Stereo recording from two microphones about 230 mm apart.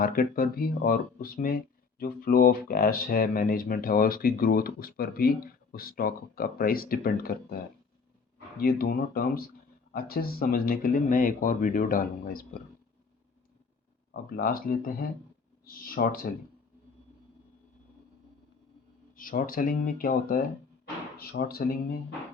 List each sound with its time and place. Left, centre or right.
0.0 s speech: left
8.6 s speech: left
14.1 s speech: left
19.1 s speech: left